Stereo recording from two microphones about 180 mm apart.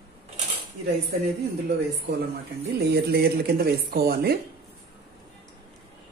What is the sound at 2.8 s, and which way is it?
Speech, 60° right (ahead or behind).